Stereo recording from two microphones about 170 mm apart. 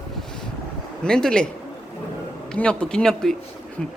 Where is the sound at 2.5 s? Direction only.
5° left (ahead or behind).